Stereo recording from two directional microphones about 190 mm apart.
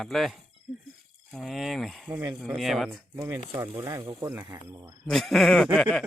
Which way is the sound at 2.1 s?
10° right (ahead or behind).